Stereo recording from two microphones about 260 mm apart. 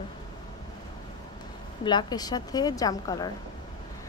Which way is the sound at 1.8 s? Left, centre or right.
Centre.